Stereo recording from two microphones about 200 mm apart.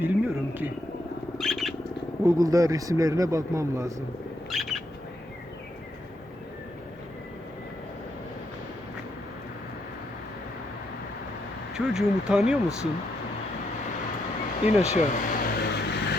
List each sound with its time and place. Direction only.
0.0 s speech: 10° right (ahead or behind)
1.4 s squawk: centre (ahead or behind)
2.2 s speech: 15° right (ahead or behind)
4.4 s bird: centre (ahead or behind)
11.7 s speech: centre (ahead or behind)
14.7 s vehicle: 35° left (ahead or behind); by 16.1 s 50° left (ahead or behind)